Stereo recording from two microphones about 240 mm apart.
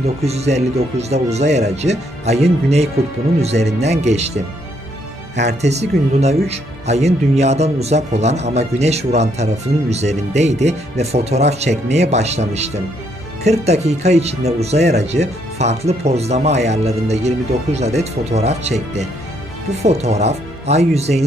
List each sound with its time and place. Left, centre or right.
0.2 s speech: right
5.3 s speech: right
5.6 s speech: right